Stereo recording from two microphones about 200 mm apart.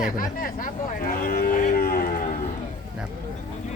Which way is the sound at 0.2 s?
45° left (ahead or behind).